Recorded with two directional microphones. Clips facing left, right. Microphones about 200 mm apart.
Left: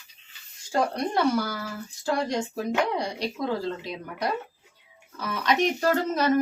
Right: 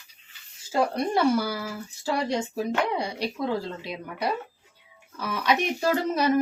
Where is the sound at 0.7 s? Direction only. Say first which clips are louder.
Right 1 dB; 5° right (ahead or behind).